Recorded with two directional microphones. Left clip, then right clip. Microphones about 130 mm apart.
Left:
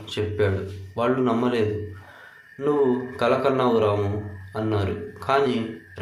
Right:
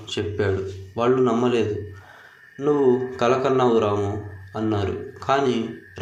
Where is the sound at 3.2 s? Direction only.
20° right (ahead or behind).